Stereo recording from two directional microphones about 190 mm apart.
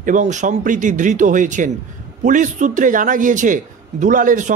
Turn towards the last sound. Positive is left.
turn(degrees=-45)  # may be behind; listen again after turning